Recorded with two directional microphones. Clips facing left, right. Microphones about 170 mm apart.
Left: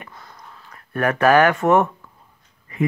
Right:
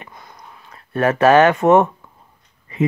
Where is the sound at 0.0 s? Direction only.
15° right (ahead or behind).